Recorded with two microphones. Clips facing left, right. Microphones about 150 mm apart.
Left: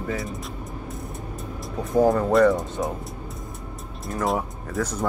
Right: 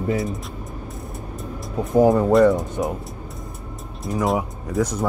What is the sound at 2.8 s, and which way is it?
Speech, 10° right (ahead or behind).